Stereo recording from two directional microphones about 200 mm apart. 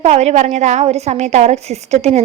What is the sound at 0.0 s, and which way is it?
A woman's voice, 30° right (ahead or behind).